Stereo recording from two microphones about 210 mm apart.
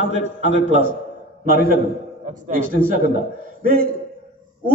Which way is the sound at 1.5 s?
45° right (ahead or behind).